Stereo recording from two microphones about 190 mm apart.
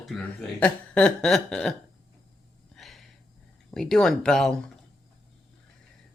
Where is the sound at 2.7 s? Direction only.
Centre (ahead or behind).